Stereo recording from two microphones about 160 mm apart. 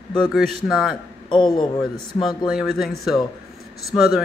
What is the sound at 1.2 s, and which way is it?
Speech, 30° left (ahead or behind).